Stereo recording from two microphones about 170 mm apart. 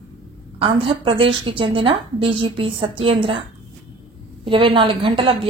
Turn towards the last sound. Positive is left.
turn(degrees=-30)  # may be behind; listen again after turning